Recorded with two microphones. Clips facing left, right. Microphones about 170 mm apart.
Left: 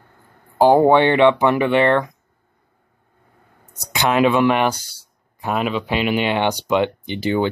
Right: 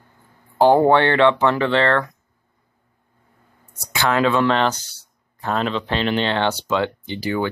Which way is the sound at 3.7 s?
20° left (ahead or behind).